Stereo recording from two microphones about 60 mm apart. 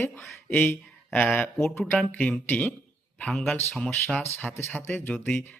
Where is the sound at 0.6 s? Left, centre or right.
Left.